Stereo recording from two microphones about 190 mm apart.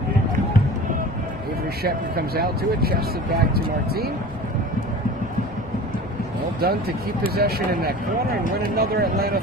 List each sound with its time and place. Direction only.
1.8 s speech: 55° right (ahead or behind)
6.6 s speech: 55° right (ahead or behind)